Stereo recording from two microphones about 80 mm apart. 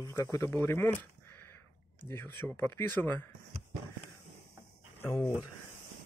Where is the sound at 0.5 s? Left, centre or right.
Left.